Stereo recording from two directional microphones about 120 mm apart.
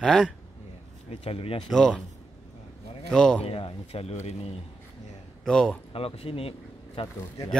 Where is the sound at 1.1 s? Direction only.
55° left (ahead or behind).